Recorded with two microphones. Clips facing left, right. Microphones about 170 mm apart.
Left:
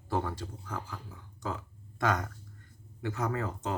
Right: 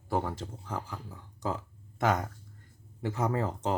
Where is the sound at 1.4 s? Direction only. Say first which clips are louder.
Right 3 dB; 30° right (ahead or behind).